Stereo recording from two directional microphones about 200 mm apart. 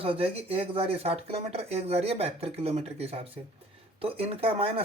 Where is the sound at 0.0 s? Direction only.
30° right (ahead or behind).